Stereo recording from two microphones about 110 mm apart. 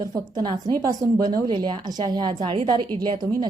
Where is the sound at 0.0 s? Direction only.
35° right (ahead or behind).